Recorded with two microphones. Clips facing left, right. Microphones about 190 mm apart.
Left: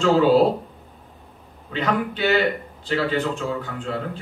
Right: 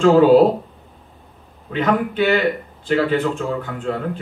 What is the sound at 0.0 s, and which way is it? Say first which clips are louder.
Speech: right 5 dB; 50° right (ahead or behind).